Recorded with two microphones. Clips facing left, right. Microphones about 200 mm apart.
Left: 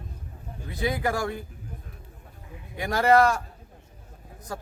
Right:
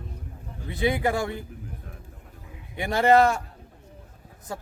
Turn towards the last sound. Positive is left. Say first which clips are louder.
# right 1 dB
turn(degrees=-25)  # may be behind; listen again after turning